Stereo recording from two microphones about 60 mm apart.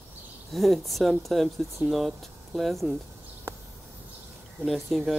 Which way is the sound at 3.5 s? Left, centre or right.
Right.